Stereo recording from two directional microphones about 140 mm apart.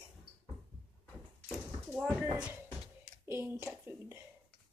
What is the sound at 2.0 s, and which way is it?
Speech, 10° right (ahead or behind).